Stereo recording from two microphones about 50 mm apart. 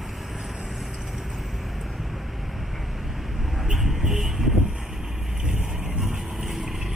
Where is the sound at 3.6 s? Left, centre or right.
Centre.